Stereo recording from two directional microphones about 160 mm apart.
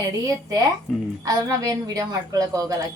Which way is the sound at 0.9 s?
Centre (ahead or behind).